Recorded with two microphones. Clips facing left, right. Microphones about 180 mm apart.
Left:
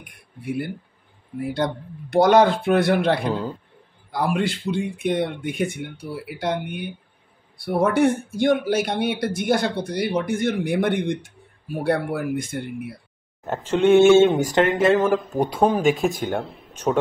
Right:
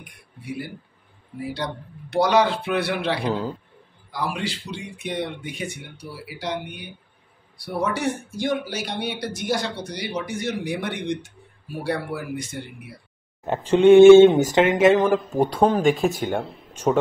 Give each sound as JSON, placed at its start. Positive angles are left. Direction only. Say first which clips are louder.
{"t": 0.0, "sound": "speech", "louder": "left 6 dB", "side_deg": 55}
{"t": 3.2, "sound": "speech", "louder": "even", "side_deg": -5}
{"t": 4.1, "sound": "speech", "louder": "left 5 dB", "side_deg": 55}
{"t": 13.5, "sound": "speech", "louder": "right 3 dB", "side_deg": -15}
{"t": 15.6, "sound": "speech", "louder": "even", "side_deg": 5}
{"t": 16.1, "sound": "speech", "louder": "even", "side_deg": -10}